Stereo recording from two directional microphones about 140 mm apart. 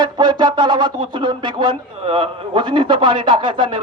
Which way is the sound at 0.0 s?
30° right (ahead or behind).